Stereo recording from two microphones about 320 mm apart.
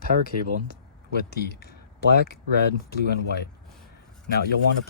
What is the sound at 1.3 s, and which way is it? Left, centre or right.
Speech, left.